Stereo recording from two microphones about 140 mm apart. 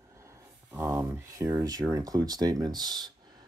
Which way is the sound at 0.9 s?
25° right (ahead or behind).